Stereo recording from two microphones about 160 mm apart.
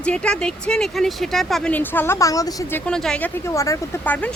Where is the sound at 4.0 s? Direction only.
10° left (ahead or behind).